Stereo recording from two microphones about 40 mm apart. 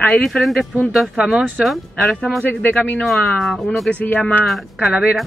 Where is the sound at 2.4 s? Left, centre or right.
Left.